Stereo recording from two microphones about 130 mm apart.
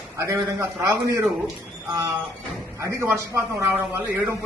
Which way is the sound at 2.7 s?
20° right (ahead or behind).